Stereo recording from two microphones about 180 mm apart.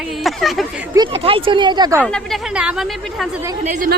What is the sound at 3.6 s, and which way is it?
Speech, 45° right (ahead or behind).